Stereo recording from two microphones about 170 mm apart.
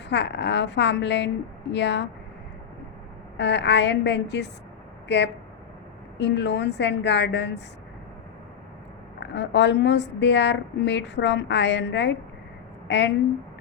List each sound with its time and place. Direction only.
0.1 s a woman's voice: 90° left
3.3 s a woman's voice: 90° left
9.2 s a woman's voice: 90° left